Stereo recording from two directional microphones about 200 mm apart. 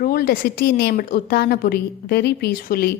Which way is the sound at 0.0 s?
50° left (ahead or behind).